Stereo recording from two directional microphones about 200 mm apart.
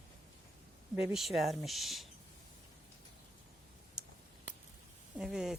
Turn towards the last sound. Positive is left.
turn(degrees=0)  # may be behind; listen again after turning